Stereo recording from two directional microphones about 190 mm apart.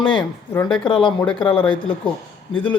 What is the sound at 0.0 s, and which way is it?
Speech, 25° left (ahead or behind).